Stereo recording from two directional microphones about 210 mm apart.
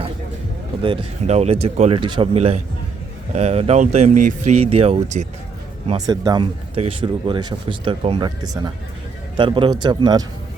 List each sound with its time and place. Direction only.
0.8 s speech: 25° right (ahead or behind)
5.9 s speech: 20° right (ahead or behind)